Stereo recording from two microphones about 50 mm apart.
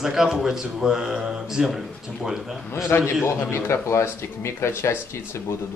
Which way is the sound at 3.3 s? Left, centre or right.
Left.